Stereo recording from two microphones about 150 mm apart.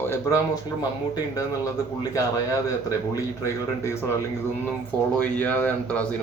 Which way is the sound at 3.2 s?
20° left (ahead or behind).